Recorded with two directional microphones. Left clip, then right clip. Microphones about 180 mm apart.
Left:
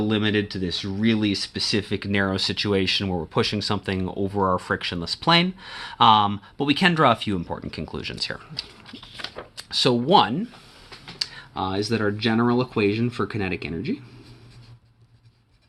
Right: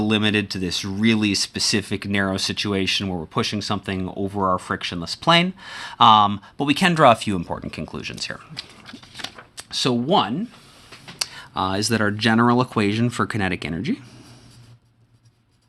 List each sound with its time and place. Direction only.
0.0 s speech: 30° right (ahead or behind); by 10.4 s centre (ahead or behind)
11.2 s computer keyboard: 30° right (ahead or behind)
11.5 s speech: 50° right (ahead or behind)